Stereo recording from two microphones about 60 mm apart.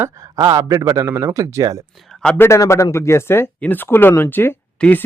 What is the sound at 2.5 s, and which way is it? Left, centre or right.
Speech, left.